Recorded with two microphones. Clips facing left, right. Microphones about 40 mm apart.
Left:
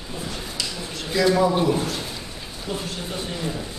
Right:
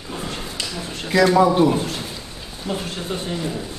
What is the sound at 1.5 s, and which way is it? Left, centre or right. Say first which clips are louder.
Speech: right 4 dB; centre.